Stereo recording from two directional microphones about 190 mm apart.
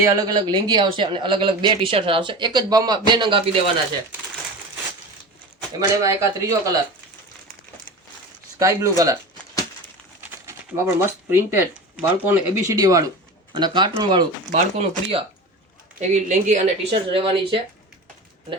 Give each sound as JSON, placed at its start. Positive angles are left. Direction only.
{"t": 0.0, "sound": "speech", "side_deg": -15}
{"t": 5.8, "sound": "speech", "side_deg": -15}
{"t": 8.5, "sound": "speech", "side_deg": -15}
{"t": 10.4, "sound": "speech", "side_deg": -15}
{"t": 14.5, "sound": "speech", "side_deg": -35}
{"t": 16.9, "sound": "speech", "side_deg": -25}